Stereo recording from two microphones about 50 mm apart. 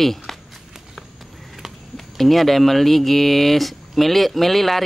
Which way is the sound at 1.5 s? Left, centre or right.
Centre.